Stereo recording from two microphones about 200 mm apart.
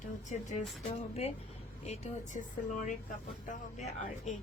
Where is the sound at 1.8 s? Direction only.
35° left (ahead or behind).